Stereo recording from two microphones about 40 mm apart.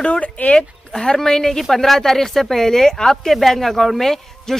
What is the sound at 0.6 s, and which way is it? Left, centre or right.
Speech, centre.